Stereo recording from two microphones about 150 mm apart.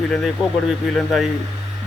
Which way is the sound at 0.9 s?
Centre (ahead or behind).